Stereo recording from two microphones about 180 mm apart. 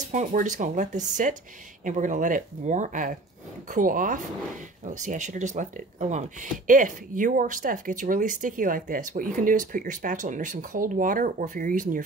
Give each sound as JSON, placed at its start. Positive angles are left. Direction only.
{"t": 0.1, "sound": "speech", "side_deg": -45}